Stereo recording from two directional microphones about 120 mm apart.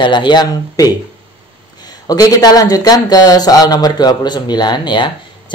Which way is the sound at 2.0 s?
30° left (ahead or behind).